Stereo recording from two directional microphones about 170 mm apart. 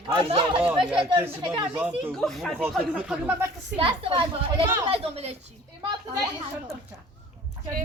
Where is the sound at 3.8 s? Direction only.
30° right (ahead or behind).